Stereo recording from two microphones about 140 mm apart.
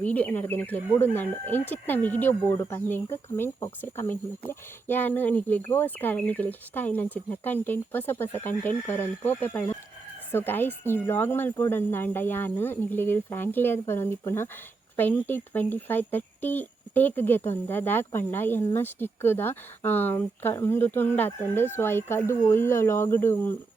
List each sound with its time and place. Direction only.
0.0 s speech: 10° left (ahead or behind)